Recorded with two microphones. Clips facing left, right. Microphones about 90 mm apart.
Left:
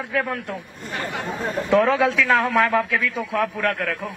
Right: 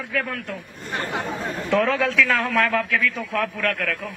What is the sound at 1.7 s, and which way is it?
A man's voice, 15° left (ahead or behind).